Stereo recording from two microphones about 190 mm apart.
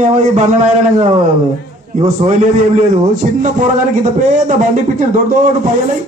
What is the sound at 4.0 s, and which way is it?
A man's voice, 45° right (ahead or behind).